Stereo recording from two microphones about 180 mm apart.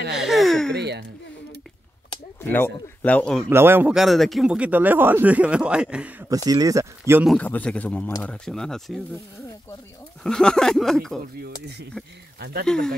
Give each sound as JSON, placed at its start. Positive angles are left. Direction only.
{"t": 0.1, "sound": "a sound", "side_deg": 0}
{"t": 0.7, "sound": "speech", "side_deg": -70}
{"t": 2.4, "sound": "a man's voice", "side_deg": 10}
{"t": 3.4, "sound": "speech", "side_deg": -10}
{"t": 6.2, "sound": "speech", "side_deg": -20}
{"t": 7.2, "sound": "a man's voice", "side_deg": 10}
{"t": 10.2, "sound": "speech", "side_deg": 5}
{"t": 12.4, "sound": "speech", "side_deg": -65}
{"t": 12.6, "sound": "speech", "side_deg": 5}